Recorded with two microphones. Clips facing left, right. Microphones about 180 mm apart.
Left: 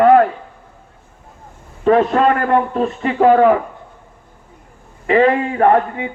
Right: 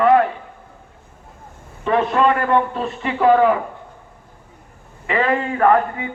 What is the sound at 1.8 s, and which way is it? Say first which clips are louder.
A man's voice: left 4 dB; 45° left (ahead or behind).